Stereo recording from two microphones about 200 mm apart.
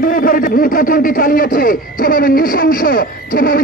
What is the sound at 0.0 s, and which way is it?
A man's voice, 45° left (ahead or behind).